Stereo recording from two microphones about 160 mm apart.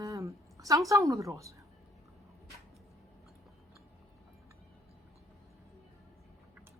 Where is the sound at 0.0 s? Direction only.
20° right (ahead or behind).